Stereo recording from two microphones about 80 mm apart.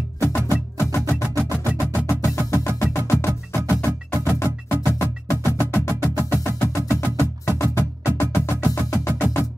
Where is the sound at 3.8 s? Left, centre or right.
Left.